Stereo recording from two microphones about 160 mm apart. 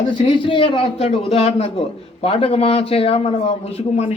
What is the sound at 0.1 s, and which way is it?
A man's voice, 35° left (ahead or behind).